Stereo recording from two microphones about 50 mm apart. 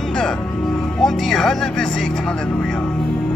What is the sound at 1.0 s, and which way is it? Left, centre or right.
Speech, centre.